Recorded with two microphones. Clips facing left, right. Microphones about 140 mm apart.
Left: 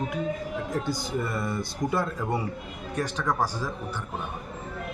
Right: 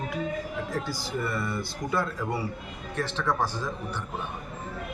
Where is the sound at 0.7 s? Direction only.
20° left (ahead or behind).